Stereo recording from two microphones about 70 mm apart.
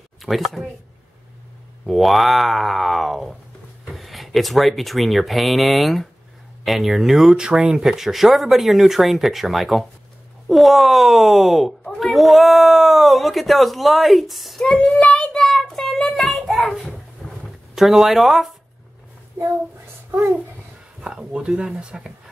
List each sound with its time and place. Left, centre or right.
0.2 s speech: centre
1.9 s speech: centre
14.6 s a child's voice: centre
15.4 s child singing: centre
20.1 s a child's voice: right
21.0 s speech: centre